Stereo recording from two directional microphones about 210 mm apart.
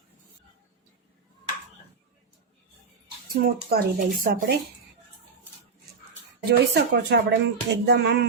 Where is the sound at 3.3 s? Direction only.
45° right (ahead or behind).